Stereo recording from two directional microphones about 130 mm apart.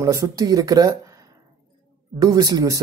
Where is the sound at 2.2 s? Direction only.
30° right (ahead or behind).